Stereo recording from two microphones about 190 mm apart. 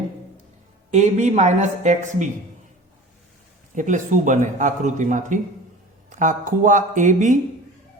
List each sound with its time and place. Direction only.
0.9 s a man's voice: 40° right (ahead or behind)
3.8 s a man's voice: 40° right (ahead or behind)